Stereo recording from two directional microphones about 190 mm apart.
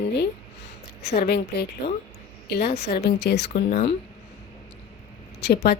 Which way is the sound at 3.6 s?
35° left (ahead or behind).